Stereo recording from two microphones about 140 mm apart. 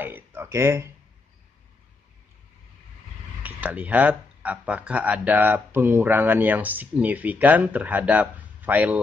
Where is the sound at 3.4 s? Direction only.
10° right (ahead or behind).